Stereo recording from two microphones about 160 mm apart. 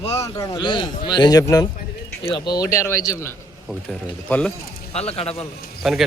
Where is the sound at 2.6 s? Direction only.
20° left (ahead or behind).